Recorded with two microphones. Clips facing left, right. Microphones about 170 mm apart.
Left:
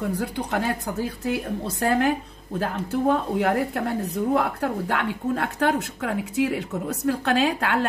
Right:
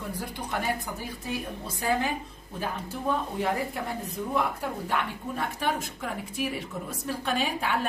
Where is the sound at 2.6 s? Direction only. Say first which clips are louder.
Left 8 dB; 80° left.